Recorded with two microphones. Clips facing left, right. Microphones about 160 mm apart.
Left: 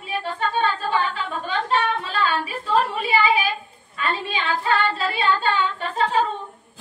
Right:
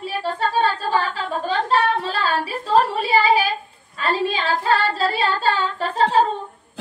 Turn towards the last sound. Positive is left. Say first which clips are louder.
# right 4 dB
turn(degrees=-35)  # may be behind; listen again after turning